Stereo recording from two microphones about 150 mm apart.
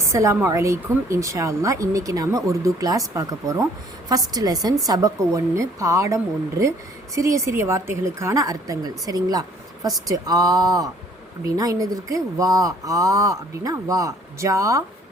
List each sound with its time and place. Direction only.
0.1 s a woman's voice: 20° right (ahead or behind)
7.2 s a woman's voice: 20° right (ahead or behind)